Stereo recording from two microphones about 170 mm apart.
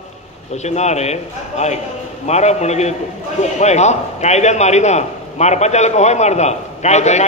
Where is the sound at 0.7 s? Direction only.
40° left (ahead or behind).